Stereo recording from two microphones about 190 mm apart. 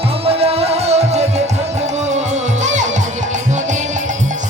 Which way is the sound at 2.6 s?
40° right (ahead or behind).